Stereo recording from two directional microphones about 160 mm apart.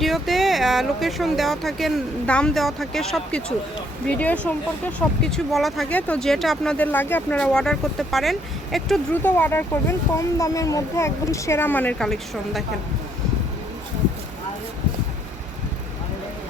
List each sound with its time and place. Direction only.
0.0 s a child's voice: centre (ahead or behind)
9.2 s a child's voice: 10° left (ahead or behind)